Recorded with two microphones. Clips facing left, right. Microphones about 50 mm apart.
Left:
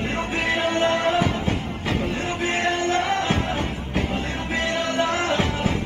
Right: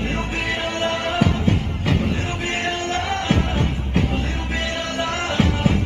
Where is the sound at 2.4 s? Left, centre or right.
Centre.